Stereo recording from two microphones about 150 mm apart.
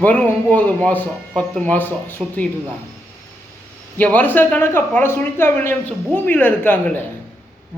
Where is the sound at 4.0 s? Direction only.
10° left (ahead or behind).